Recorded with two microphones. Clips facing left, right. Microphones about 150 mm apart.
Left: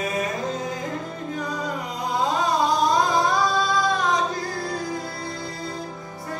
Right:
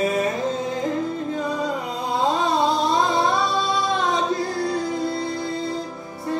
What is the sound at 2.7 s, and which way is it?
Singing, 25° right (ahead or behind).